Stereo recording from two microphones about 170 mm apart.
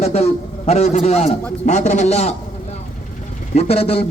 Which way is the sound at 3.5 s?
35° left (ahead or behind).